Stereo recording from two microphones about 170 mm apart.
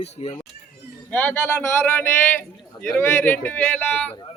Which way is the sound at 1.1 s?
10° left (ahead or behind).